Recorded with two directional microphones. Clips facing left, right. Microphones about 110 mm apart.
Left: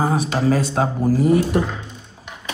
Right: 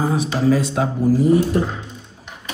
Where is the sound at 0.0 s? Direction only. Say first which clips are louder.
Even; 45° left (ahead or behind).